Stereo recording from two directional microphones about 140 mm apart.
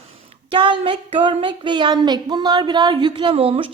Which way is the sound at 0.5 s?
35° right (ahead or behind).